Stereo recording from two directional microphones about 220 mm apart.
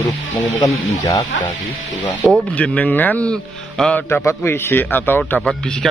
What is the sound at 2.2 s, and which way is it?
Speech, 5° left (ahead or behind).